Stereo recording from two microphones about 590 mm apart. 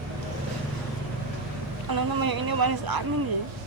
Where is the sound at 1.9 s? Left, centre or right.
Right.